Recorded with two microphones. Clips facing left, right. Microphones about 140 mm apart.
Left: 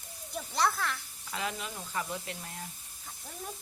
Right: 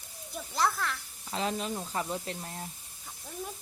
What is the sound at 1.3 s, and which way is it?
Speech, 30° right (ahead or behind).